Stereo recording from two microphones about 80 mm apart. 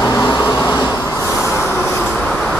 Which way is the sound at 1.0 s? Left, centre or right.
Left.